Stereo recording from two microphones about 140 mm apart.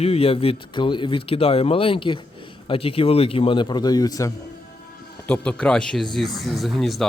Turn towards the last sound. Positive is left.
turn(degrees=0)  # may be behind; listen again after turning